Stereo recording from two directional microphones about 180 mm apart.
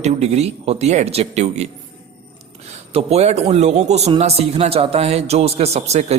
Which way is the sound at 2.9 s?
35° right (ahead or behind).